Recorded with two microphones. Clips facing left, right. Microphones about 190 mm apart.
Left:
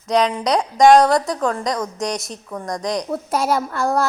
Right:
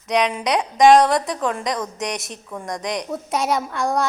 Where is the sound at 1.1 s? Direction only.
25° right (ahead or behind).